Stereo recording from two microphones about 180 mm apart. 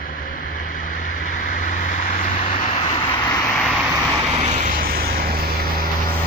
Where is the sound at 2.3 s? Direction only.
35° left (ahead or behind).